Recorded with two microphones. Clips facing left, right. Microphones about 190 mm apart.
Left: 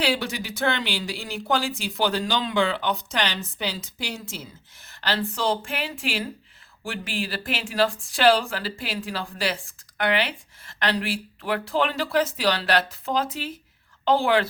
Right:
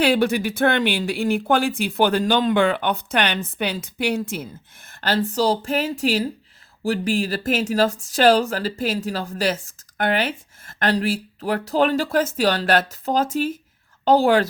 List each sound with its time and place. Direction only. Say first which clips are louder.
0.0 s a woman's voice: right 8 dB; 55° right (ahead or behind)